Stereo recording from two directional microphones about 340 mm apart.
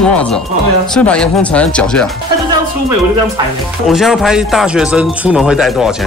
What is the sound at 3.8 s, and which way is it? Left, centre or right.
Speech, centre.